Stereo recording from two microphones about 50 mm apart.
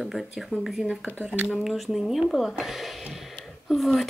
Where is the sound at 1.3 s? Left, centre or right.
Left.